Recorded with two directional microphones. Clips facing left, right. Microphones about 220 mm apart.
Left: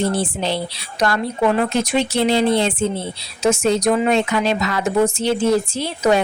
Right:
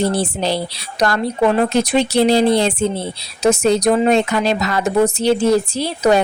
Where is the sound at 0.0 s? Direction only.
40° right (ahead or behind).